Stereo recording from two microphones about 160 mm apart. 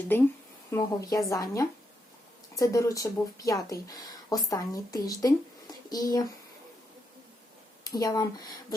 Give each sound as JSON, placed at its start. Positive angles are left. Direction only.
{"t": 0.7, "sound": "speech", "side_deg": 20}
{"t": 7.9, "sound": "speech", "side_deg": 20}